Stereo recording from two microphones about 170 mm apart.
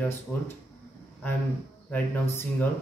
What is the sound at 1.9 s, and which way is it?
Speech, 10° left (ahead or behind).